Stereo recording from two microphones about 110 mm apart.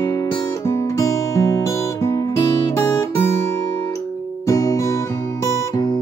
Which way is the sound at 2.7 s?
25° left (ahead or behind).